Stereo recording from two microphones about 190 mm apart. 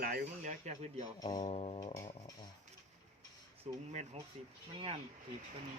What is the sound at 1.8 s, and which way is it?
Speech, 20° left (ahead or behind).